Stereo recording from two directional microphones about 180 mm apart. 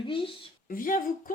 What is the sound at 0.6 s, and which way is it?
Speech, 50° left (ahead or behind).